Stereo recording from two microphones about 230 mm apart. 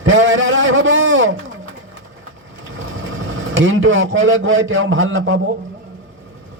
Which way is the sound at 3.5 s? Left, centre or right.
Right.